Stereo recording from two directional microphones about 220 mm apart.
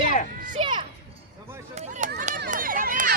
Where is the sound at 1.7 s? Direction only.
30° right (ahead or behind).